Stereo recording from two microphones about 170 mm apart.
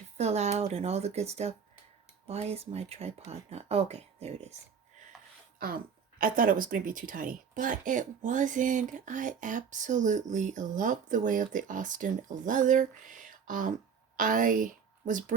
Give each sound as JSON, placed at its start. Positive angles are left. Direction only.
{"t": 0.2, "sound": "speech", "side_deg": -40}
{"t": 6.1, "sound": "speech", "side_deg": -55}